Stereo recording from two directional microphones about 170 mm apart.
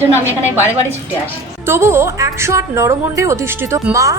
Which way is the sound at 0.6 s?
10° right (ahead or behind).